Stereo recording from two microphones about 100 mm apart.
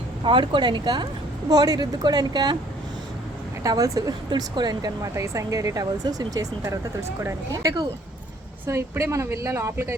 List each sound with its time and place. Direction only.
0.3 s speech: 55° right (ahead or behind)
3.6 s speech: 35° right (ahead or behind)
4.3 s speech: 45° right (ahead or behind); by 9.9 s 30° right (ahead or behind)